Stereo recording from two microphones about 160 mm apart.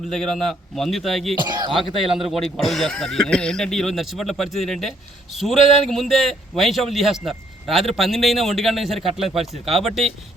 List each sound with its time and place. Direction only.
0.1 s a man's voice: centre (ahead or behind)
1.5 s speech: 25° right (ahead or behind)
2.3 s a man's voice: centre (ahead or behind)